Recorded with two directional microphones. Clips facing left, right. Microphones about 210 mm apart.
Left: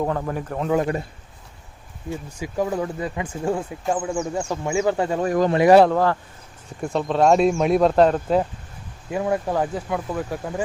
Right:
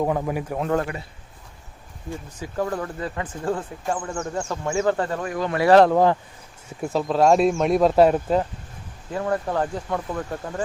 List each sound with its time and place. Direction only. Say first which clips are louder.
0.0 s speech: right 1 dB; 10° right (ahead or behind)
2.3 s speech: left 2 dB; 10° left (ahead or behind)
5.2 s speech: left 7 dB; 40° left (ahead or behind)
5.5 s speech: left 1 dB; 15° left (ahead or behind)
5.9 s speech: right 2 dB; 15° right (ahead or behind)
6.7 s speech: even; 5° right (ahead or behind)
9.0 s speech: left 2 dB; 15° left (ahead or behind)